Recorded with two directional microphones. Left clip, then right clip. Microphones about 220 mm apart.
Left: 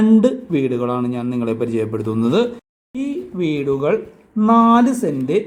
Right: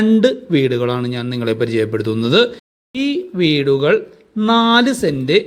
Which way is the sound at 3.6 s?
50° right (ahead or behind).